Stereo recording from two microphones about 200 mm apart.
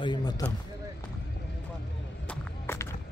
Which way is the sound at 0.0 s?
20° left (ahead or behind).